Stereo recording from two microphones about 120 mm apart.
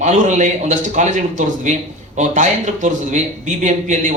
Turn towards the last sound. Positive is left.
turn(degrees=-85)